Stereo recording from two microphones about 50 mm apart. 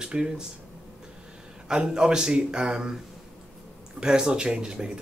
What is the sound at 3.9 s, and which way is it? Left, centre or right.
Speech, centre.